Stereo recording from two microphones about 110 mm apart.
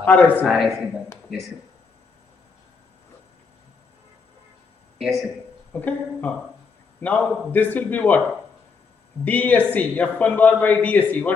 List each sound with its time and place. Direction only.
0.0 s a man's voice: 15° left (ahead or behind)
0.5 s a man's voice: centre (ahead or behind)
4.9 s a sound: centre (ahead or behind)
5.7 s a man's voice: 15° left (ahead or behind)
9.2 s a man's voice: 15° left (ahead or behind)